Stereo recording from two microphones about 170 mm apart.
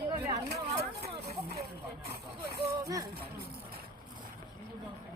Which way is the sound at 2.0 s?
70° right (ahead or behind).